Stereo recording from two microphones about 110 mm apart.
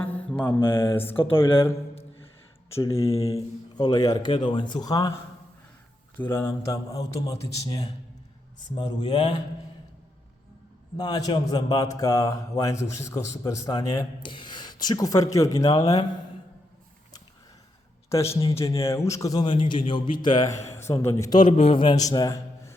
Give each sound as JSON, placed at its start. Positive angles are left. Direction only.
{"t": 0.0, "sound": "mantra", "side_deg": 15}
{"t": 0.6, "sound": "a man's voice", "side_deg": 20}
{"t": 3.0, "sound": "a man's voice", "side_deg": 65}
{"t": 3.3, "sound": "a man's voice", "side_deg": 40}
{"t": 6.1, "sound": "a man's voice", "side_deg": 20}
{"t": 10.9, "sound": "a man's voice", "side_deg": 40}
{"t": 14.2, "sound": "a man's voice", "side_deg": 45}
{"t": 18.8, "sound": "a man's voice", "side_deg": 25}
{"t": 19.5, "sound": "speech", "side_deg": 50}
{"t": 20.5, "sound": "a man's voice", "side_deg": 25}
{"t": 21.5, "sound": "a man's voice", "side_deg": 60}
{"t": 21.9, "sound": "a man's voice", "side_deg": 35}